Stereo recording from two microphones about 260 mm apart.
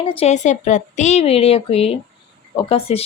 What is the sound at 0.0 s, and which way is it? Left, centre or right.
A woman's voice, left.